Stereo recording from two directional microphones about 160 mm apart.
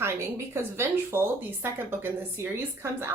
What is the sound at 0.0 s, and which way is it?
Speech, 15° right (ahead or behind).